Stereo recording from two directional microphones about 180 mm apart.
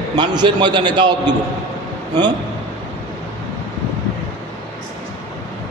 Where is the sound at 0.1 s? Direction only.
25° right (ahead or behind).